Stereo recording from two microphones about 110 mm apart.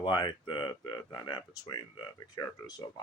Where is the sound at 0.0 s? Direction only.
40° left (ahead or behind).